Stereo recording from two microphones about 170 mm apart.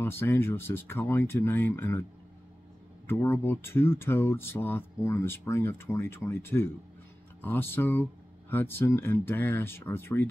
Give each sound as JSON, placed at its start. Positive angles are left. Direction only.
{"t": 0.0, "sound": "speech", "side_deg": 15}
{"t": 3.1, "sound": "speech", "side_deg": 15}